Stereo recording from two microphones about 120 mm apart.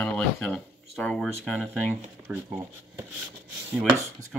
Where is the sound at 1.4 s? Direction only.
10° right (ahead or behind).